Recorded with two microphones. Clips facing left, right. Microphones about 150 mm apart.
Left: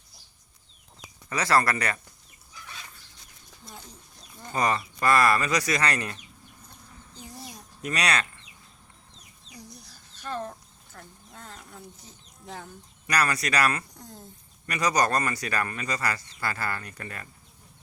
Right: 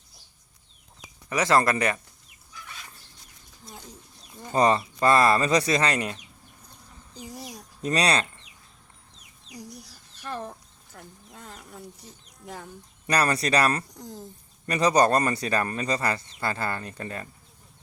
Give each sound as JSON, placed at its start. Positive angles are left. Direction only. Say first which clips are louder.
{"t": 1.3, "sound": "speech", "louder": "right 2 dB", "side_deg": -20}
{"t": 4.5, "sound": "speech", "louder": "right 5 dB", "side_deg": -30}
{"t": 7.2, "sound": "a sound", "louder": "right 4 dB", "side_deg": -15}
{"t": 7.8, "sound": "speech", "louder": "right 4 dB", "side_deg": -30}
{"t": 9.9, "sound": "a sound", "louder": "left 2 dB", "side_deg": -5}
{"t": 13.1, "sound": "speech", "louder": "right 3 dB", "side_deg": -30}